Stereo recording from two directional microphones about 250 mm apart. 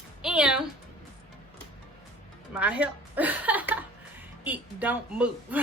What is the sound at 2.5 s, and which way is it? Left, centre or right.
A woman's voice, centre.